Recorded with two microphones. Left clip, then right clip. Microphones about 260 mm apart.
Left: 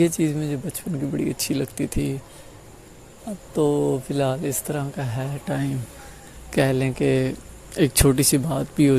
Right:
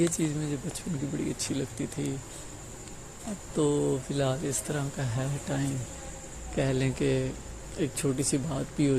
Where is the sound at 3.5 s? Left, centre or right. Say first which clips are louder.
Left 6 dB; left.